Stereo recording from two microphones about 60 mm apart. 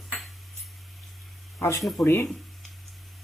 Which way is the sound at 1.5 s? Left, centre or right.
Left.